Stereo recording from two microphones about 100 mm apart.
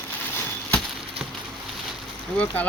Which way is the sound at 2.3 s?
15° left (ahead or behind).